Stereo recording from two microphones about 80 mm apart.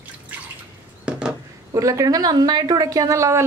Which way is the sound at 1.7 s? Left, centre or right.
Right.